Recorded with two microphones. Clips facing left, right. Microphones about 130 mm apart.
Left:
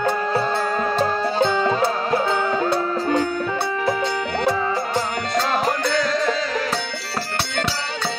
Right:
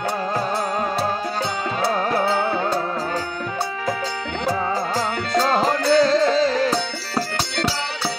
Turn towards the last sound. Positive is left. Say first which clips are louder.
# right 5 dB
turn(degrees=-30)  # may be behind; listen again after turning